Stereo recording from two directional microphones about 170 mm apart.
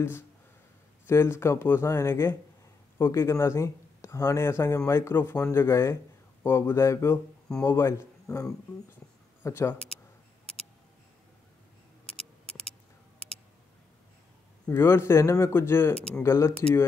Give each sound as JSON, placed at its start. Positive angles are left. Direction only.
{"t": 1.0, "sound": "a man's voice", "side_deg": 15}
{"t": 14.7, "sound": "speech", "side_deg": 15}